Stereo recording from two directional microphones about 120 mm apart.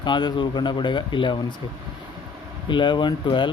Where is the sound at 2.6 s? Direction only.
40° left (ahead or behind).